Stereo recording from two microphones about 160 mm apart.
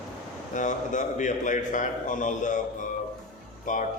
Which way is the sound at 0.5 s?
50° left (ahead or behind).